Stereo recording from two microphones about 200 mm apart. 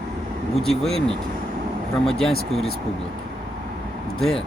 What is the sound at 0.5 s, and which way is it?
Speech, centre (ahead or behind).